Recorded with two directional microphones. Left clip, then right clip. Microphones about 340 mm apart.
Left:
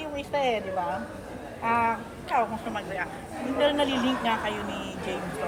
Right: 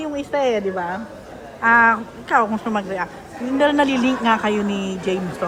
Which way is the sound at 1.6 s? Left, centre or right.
Right.